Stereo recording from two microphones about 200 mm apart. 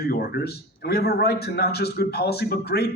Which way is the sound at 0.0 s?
50° left (ahead or behind).